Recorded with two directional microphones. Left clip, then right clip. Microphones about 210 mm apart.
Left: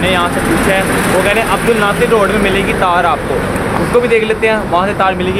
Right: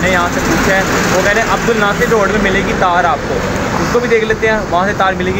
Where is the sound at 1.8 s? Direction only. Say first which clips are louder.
Left 1 dB; centre (ahead or behind).